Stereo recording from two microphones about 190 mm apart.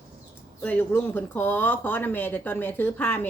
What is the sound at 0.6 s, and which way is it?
Speech, 10° left (ahead or behind).